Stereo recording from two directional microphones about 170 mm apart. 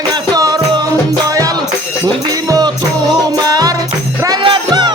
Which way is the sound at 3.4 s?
25° right (ahead or behind).